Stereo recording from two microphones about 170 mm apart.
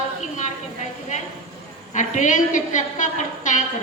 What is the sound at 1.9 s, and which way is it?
A woman's voice, 45° left (ahead or behind).